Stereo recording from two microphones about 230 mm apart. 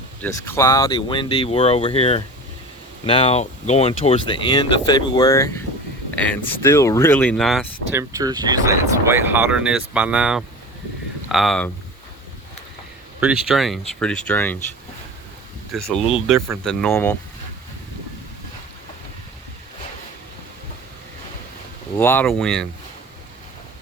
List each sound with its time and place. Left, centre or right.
0.2 s speech: centre
7.9 s speech: centre
13.1 s speech: centre
15.7 s speech: centre
21.9 s speech: centre